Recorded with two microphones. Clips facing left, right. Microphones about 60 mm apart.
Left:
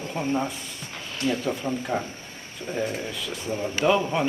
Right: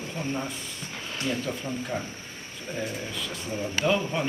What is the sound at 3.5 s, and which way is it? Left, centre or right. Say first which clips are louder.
Speech: left 3 dB; centre.